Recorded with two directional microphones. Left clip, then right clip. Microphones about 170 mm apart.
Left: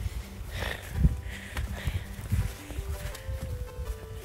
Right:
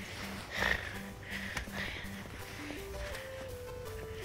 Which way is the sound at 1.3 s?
30° left (ahead or behind).